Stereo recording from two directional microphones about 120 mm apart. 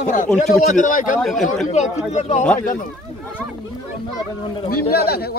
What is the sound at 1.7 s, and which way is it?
Speech, 80° left.